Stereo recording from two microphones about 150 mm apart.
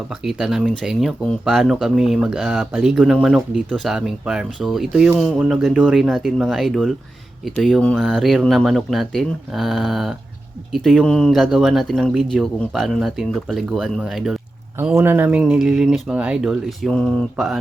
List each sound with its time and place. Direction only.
0.1 s speech: centre (ahead or behind)
14.9 s speech: 15° right (ahead or behind)